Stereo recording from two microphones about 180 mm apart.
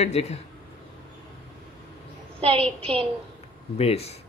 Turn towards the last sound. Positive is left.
turn(degrees=35)  # may be behind; listen again after turning